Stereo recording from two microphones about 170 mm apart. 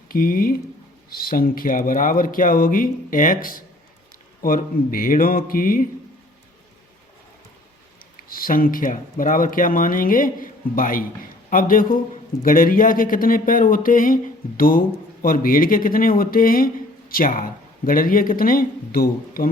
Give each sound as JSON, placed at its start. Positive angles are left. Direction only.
{"t": 0.1, "sound": "speech", "side_deg": 55}
{"t": 8.3, "sound": "speech", "side_deg": 55}